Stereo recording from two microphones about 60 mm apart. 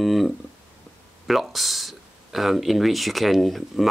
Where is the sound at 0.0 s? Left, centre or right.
Centre.